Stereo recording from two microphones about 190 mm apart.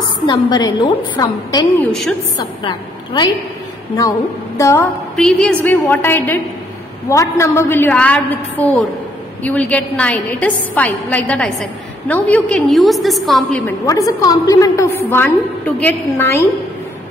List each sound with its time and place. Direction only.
0.3 s a woman's voice: 20° left (ahead or behind)
1.8 s a woman's voice: 5° left (ahead or behind)
2.3 s a woman's voice: 25° left (ahead or behind)
4.6 s a woman's voice: 15° left (ahead or behind)
13.6 s a woman's voice: 15° left (ahead or behind)